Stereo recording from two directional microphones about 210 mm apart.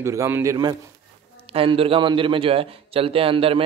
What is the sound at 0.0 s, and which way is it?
A man's voice, 15° right (ahead or behind).